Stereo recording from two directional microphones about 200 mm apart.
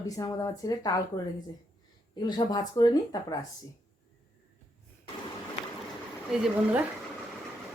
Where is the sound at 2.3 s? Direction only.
20° left (ahead or behind).